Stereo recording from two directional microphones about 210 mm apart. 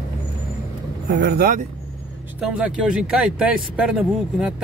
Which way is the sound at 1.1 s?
50° right (ahead or behind).